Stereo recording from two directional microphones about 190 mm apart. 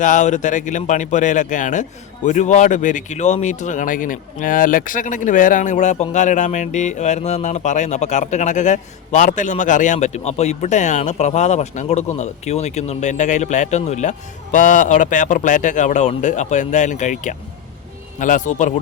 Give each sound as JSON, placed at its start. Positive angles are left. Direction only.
{"t": 0.0, "sound": "a man's voice", "side_deg": 40}